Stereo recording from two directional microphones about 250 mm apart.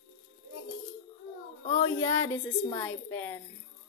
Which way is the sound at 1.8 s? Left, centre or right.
Centre.